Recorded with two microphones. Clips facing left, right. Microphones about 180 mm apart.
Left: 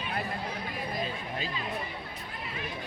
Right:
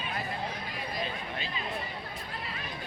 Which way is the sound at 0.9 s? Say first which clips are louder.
Even; 40° left (ahead or behind).